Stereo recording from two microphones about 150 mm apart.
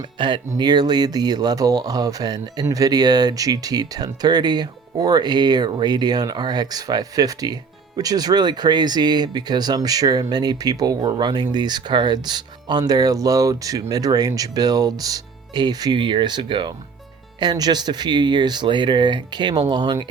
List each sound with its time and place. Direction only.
0.2 s speech: 30° right (ahead or behind)